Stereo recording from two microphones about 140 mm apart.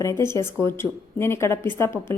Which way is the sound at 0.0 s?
20° left (ahead or behind).